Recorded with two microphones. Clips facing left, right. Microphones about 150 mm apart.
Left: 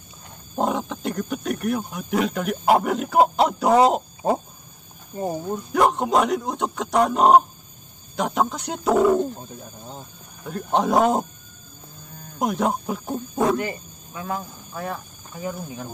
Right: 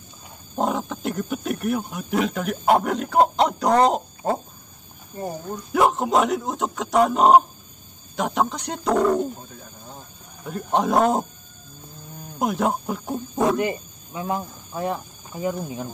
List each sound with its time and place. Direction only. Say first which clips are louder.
0.6 s speech: even; centre (ahead or behind)
5.1 s speech: left 4 dB; 15° left (ahead or behind)
5.7 s speech: even; centre (ahead or behind)
9.6 s speech: left 3 dB; 25° left (ahead or behind)
10.4 s speech: even; centre (ahead or behind)
12.4 s speech: even; centre (ahead or behind)
13.6 s speech: right 4 dB; 20° right (ahead or behind)